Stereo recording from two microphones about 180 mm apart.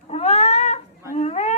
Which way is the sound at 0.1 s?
35° left (ahead or behind).